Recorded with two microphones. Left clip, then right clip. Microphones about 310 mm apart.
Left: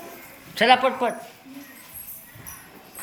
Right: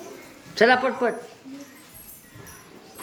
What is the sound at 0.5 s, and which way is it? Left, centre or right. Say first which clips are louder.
Speech: left 1 dB; centre.